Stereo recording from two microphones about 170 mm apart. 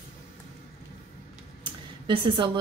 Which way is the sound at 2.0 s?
30° right (ahead or behind).